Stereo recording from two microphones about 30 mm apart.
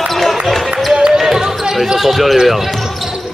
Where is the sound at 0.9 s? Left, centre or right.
Right.